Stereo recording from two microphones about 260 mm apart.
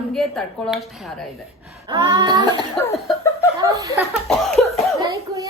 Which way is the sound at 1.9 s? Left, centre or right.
Centre.